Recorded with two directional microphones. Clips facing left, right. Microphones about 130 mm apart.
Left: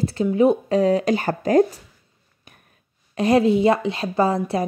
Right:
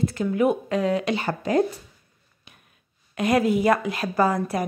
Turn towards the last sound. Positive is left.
turn(degrees=30)  # may be behind; listen again after turning